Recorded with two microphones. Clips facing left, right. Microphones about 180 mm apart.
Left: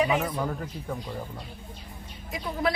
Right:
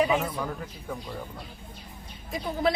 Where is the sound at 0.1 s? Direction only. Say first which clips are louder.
Even; 10° left (ahead or behind).